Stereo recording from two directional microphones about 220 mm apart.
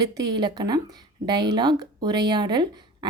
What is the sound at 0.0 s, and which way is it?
Speech, 15° right (ahead or behind).